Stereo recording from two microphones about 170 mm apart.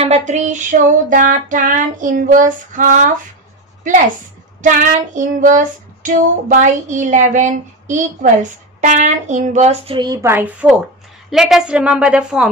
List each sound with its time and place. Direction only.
0.0 s a woman's voice: 40° right (ahead or behind)
4.6 s a woman's voice: 50° right (ahead or behind); by 12.4 s 5° right (ahead or behind)